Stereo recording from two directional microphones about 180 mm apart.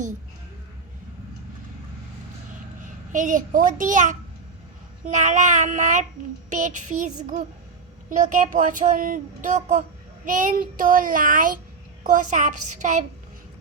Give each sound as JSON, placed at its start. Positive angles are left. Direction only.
{"t": 3.1, "sound": "speech", "side_deg": -45}
{"t": 8.1, "sound": "speech", "side_deg": -45}